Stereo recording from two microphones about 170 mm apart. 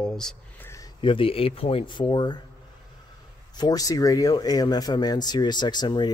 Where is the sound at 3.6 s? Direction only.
20° left (ahead or behind).